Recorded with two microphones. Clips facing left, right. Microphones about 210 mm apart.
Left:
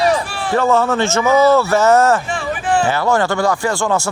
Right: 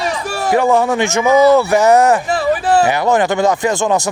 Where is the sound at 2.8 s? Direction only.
15° right (ahead or behind).